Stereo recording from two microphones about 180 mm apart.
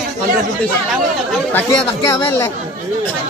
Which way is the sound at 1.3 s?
10° left (ahead or behind).